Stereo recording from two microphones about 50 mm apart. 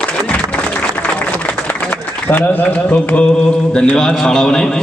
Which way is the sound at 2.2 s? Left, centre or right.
Left.